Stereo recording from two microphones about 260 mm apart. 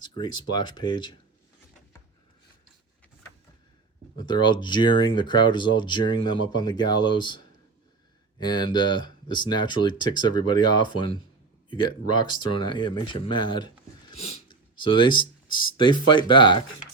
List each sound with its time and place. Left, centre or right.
0.0 s speech: centre
4.2 s speech: centre
8.4 s speech: centre
11.7 s speech: centre